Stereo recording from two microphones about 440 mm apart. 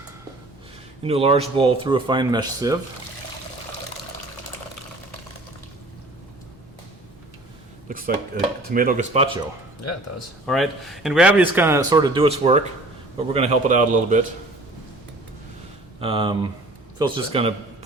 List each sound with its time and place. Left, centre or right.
1.0 s speech: centre
7.9 s speech: centre
9.8 s speech: left
10.4 s speech: centre
16.0 s speech: centre